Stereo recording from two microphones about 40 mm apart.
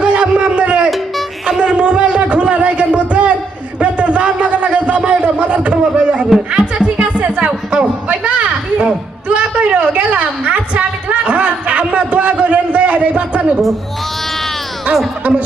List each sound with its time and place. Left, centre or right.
0.0 s a sound: right
6.5 s music: right
15.2 s music: right